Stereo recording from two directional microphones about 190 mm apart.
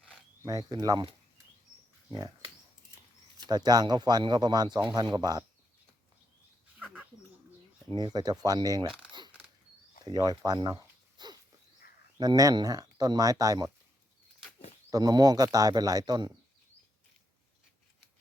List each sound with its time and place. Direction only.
0.4 s speech: 20° right (ahead or behind)
2.0 s speech: 20° right (ahead or behind)
3.4 s speech: 20° right (ahead or behind)
6.7 s bird: 5° right (ahead or behind)
7.9 s speech: 20° right (ahead or behind)
10.0 s a sound: 20° right (ahead or behind)
12.1 s speech: 20° right (ahead or behind)
14.8 s speech: 20° right (ahead or behind)